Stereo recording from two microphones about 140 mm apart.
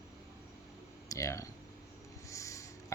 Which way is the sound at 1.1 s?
20° left (ahead or behind).